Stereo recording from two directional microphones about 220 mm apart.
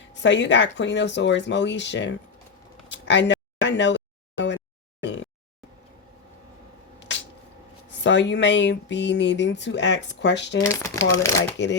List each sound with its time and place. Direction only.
0.1 s speech: 55° left (ahead or behind)
2.9 s a sound: 55° left (ahead or behind)
5.0 s speech: 55° left (ahead or behind)
7.9 s speech: 55° left (ahead or behind)
10.6 s speech: 15° left (ahead or behind)
11.5 s speech: 55° left (ahead or behind)